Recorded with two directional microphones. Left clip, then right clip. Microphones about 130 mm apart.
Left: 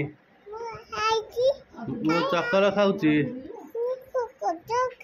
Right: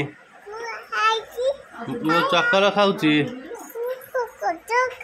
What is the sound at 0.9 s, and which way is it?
Child singing, 10° right (ahead or behind).